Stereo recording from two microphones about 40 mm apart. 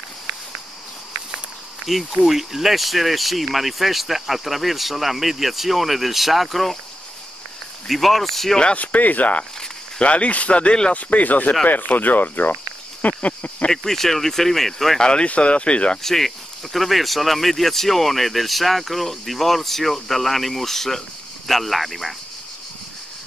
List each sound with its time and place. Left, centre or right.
2.2 s speech: centre
7.9 s speech: centre
8.7 s speech: left
13.0 s a sound: left
13.7 s speech: centre
15.0 s speech: centre
15.2 s speech: left
16.0 s speech: centre